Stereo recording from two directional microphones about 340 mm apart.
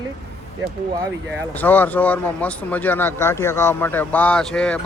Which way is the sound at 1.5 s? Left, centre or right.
Centre.